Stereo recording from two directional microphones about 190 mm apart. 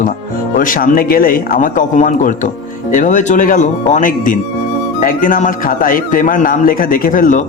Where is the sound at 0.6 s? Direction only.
45° left (ahead or behind).